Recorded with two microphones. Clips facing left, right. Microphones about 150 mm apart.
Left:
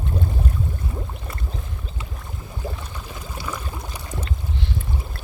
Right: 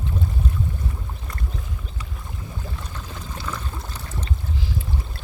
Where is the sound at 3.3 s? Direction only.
10° left (ahead or behind).